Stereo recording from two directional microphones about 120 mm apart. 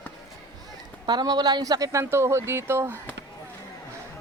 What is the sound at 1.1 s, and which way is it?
A woman's voice, 35° right (ahead or behind).